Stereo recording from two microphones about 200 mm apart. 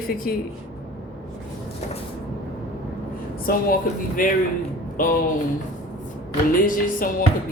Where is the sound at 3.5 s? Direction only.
45° left (ahead or behind).